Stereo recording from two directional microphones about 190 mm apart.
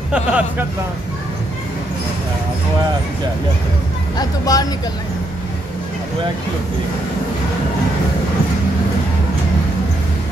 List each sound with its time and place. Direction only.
0.1 s speech: 5° right (ahead or behind)
4.2 s speech: 20° left (ahead or behind)